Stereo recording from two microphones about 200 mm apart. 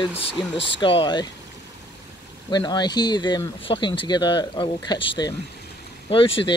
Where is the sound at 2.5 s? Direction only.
20° left (ahead or behind).